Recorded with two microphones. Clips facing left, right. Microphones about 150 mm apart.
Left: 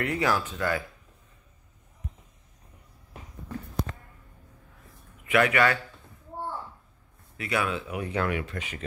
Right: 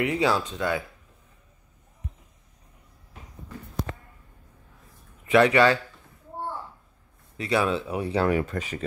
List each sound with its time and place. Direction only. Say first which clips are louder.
0.0 s speech: right 3 dB; 20° right (ahead or behind)
5.2 s speech: right 5 dB; 30° right (ahead or behind)
7.3 s speech: right 5 dB; 30° right (ahead or behind)